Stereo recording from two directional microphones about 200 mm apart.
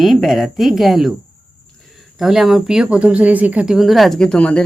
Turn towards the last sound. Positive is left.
turn(degrees=5)  # may be behind; listen again after turning